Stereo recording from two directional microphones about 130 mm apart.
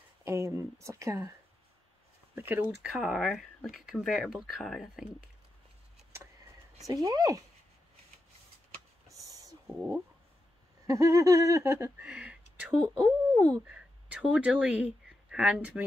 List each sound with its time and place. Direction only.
0.2 s speech: 25° right (ahead or behind)
2.3 s speech: 15° right (ahead or behind)
6.9 s speech: 30° right (ahead or behind)
9.2 s a sound: 30° right (ahead or behind)
10.9 s speech: 25° right (ahead or behind)
12.0 s speech: 10° right (ahead or behind)
13.0 s speech: 20° right (ahead or behind)
13.7 s speech: 10° right (ahead or behind)